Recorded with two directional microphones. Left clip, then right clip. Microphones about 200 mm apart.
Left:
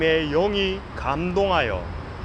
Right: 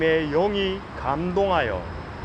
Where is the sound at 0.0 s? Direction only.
25° left (ahead or behind).